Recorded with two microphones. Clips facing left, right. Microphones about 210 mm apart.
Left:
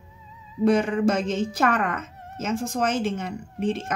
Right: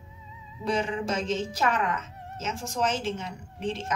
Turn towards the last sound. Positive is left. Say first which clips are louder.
# left 5 dB
turn(degrees=55)  # may be behind; listen again after turning